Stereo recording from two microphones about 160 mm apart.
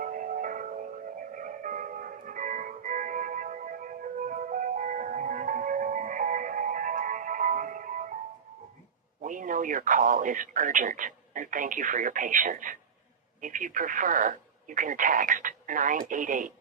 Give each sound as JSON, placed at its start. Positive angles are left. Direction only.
{"t": 0.0, "sound": "music", "side_deg": -55}
{"t": 9.2, "sound": "a man's voice", "side_deg": -55}